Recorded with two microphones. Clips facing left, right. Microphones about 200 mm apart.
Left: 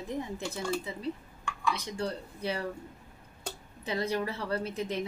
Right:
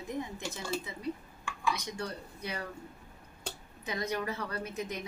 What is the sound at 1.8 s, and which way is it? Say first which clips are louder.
Speech: left 4 dB; 30° left (ahead or behind).